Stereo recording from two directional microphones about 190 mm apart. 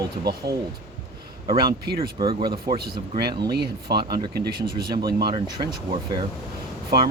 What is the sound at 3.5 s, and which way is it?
Speech, 60° right (ahead or behind).